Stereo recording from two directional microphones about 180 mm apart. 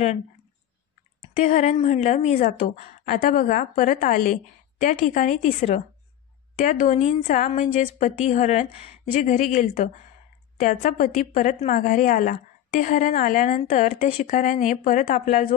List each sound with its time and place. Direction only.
1.3 s a woman's voice: 45° left (ahead or behind)